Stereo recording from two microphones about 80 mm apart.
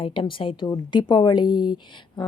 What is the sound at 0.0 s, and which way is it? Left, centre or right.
Speech, left.